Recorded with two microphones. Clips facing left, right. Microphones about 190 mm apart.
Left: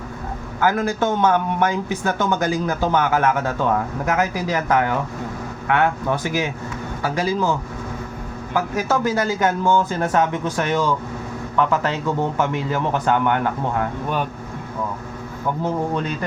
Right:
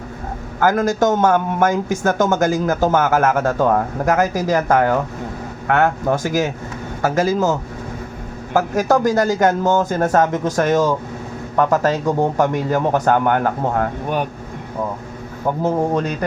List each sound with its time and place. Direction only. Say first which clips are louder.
0.6 s speech: right 4 dB; 45° right (ahead or behind)
15.6 s speech: right 5 dB; 45° right (ahead or behind)